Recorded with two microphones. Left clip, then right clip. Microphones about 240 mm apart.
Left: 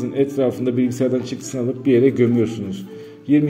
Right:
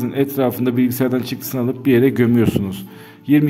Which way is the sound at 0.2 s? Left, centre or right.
Right.